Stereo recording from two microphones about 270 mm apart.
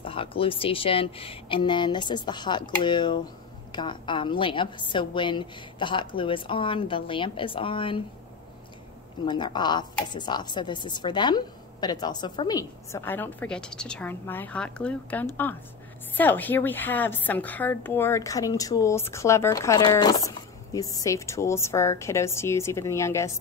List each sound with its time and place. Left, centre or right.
0.0 s a woman's voice: centre
9.2 s a woman's voice: centre